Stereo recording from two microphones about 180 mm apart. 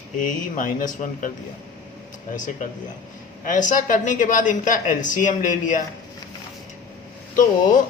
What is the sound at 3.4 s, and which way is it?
Speech, 45° left (ahead or behind).